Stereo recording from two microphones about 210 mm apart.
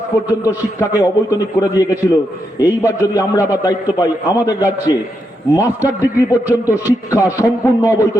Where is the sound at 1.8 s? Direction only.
15° left (ahead or behind).